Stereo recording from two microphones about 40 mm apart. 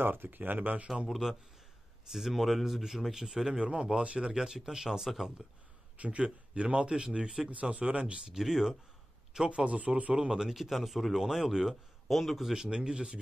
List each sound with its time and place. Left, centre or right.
0.0 s speech: right
1.0 s speech: centre
5.9 s speech: right
7.7 s speech: right
9.3 s speech: centre
9.7 s speech: right
10.1 s speech: centre
10.5 s speech: centre
12.1 s speech: centre
12.4 s speech: centre